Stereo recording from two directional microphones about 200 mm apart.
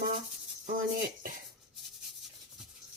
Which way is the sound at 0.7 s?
45° right (ahead or behind).